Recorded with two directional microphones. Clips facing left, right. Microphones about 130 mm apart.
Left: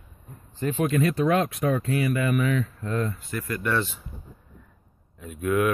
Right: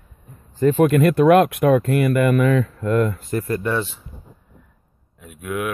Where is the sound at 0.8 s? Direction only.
60° right (ahead or behind).